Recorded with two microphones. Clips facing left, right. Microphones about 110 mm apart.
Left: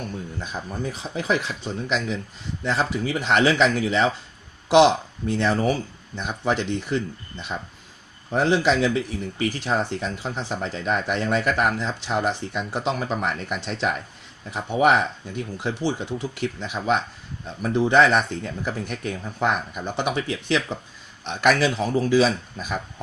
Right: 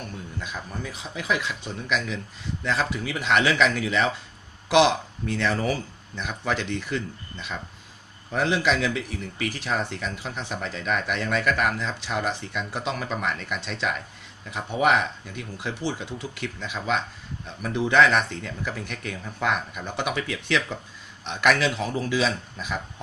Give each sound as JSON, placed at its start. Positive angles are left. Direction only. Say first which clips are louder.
{"t": 0.3, "sound": "speech", "louder": "left 1 dB", "side_deg": 35}